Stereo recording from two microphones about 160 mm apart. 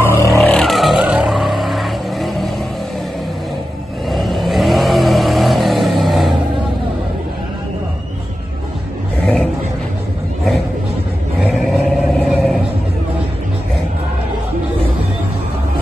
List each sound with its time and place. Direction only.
0.0 s vehicle: 15° left (ahead or behind)
0.4 s vehicle: centre (ahead or behind)
4.1 s vehicle: centre (ahead or behind)
9.2 s a sound: 5° left (ahead or behind)
11.5 s vehicle: centre (ahead or behind)